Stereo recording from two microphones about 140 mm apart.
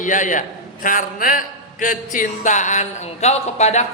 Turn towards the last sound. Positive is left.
turn(degrees=55)  # may be behind; listen again after turning